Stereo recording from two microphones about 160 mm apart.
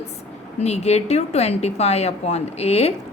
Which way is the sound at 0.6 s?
45° left (ahead or behind).